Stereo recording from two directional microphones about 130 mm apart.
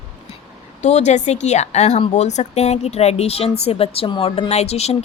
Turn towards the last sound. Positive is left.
turn(degrees=55)  # may be behind; listen again after turning